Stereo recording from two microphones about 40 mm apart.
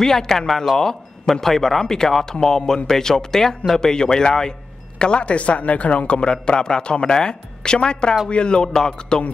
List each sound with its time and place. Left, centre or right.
0.0 s speech: centre